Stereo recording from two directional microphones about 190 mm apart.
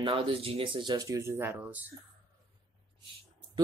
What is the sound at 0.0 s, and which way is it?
Speech, 30° right (ahead or behind).